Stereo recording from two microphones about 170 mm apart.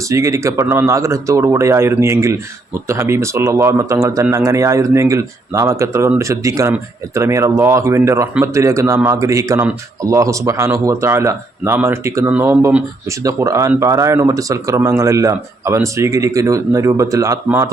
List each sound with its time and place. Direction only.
0.1 s speech: 20° right (ahead or behind)